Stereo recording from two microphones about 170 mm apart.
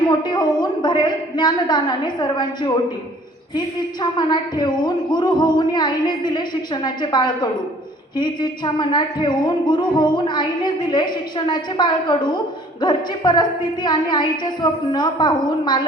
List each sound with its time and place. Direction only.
0.1 s speech: 25° left (ahead or behind)
4.2 s speech: 25° left (ahead or behind)